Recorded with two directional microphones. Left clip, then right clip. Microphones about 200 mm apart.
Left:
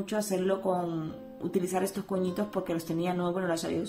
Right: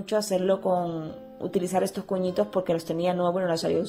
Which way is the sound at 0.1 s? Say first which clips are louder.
Right 6 dB; 40° right (ahead or behind).